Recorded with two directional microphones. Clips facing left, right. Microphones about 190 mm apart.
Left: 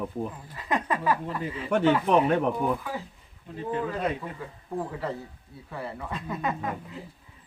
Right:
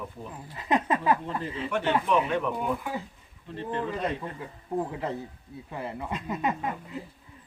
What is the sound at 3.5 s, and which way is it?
Speech, 5° left (ahead or behind).